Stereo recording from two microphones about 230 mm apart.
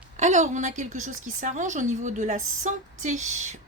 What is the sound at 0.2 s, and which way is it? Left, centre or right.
A woman's voice, right.